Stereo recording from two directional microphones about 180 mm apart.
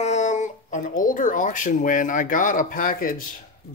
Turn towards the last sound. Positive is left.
turn(degrees=50)  # may be behind; listen again after turning